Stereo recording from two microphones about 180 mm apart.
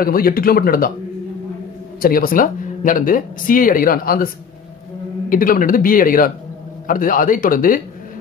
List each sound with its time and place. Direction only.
0.0 s speech: 55° left (ahead or behind)
2.0 s speech: 55° left (ahead or behind)
5.3 s speech: 50° left (ahead or behind)